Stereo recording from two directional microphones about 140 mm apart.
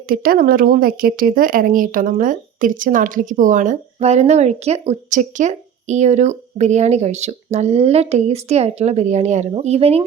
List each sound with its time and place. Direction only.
0.1 s speech: 90° right; by 10.0 s 45° right (ahead or behind)